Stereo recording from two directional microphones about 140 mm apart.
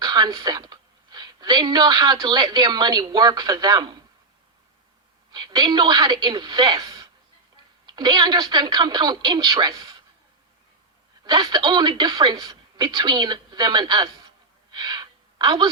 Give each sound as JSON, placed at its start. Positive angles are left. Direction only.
{"t": 0.0, "sound": "a woman's voice", "side_deg": -30}
{"t": 5.3, "sound": "speech", "side_deg": -30}
{"t": 11.2, "sound": "a woman's voice", "side_deg": -30}